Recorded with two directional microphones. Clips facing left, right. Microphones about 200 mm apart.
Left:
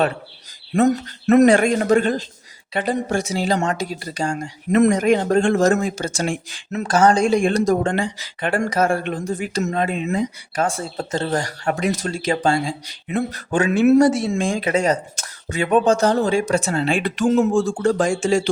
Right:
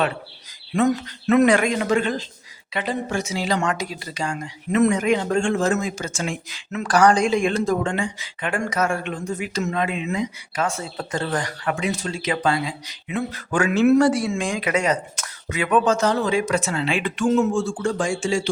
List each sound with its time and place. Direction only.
0.7 s speech: 45° left (ahead or behind)
6.2 s speech: 45° left (ahead or behind)
6.8 s speech: 25° left (ahead or behind)
8.4 s speech: 35° left (ahead or behind)
10.9 s speech: 25° left (ahead or behind)
11.6 s speech: 45° left (ahead or behind)
13.5 s speech: 25° left (ahead or behind); by 18.4 s 45° left (ahead or behind)